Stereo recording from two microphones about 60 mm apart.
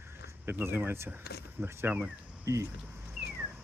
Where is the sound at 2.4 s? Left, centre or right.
Right.